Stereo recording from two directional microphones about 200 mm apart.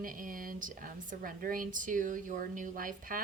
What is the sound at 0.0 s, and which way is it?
Speech, 45° right (ahead or behind).